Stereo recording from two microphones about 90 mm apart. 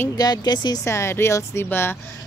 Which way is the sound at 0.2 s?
50° left (ahead or behind).